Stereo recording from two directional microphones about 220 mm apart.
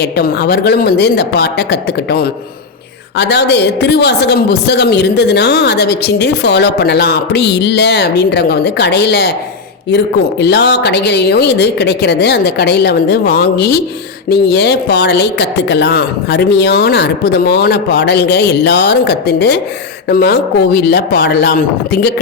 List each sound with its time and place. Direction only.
0.0 s a woman's voice: 50° left (ahead or behind)
10.4 s a woman's voice: 50° left (ahead or behind)